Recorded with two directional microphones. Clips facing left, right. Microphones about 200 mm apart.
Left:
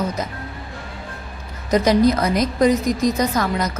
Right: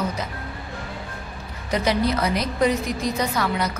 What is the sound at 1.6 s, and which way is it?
A woman's voice, 45° left (ahead or behind).